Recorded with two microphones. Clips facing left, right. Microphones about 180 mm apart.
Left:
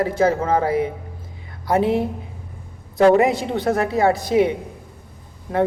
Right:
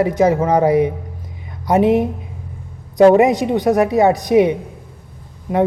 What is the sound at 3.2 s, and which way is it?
Speech, 20° right (ahead or behind).